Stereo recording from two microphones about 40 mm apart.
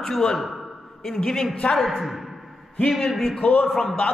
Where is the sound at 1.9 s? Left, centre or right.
Centre.